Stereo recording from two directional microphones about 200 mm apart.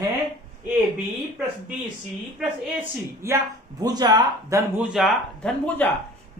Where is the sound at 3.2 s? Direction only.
15° right (ahead or behind).